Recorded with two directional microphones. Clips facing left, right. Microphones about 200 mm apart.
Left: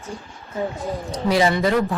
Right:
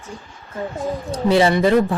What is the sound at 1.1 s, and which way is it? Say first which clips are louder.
Speech: right 3 dB; 30° right (ahead or behind).